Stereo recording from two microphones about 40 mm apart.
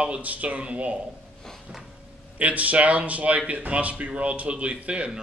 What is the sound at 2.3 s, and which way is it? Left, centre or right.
Speech, right.